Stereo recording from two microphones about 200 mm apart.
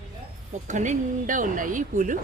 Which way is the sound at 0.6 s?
40° right (ahead or behind).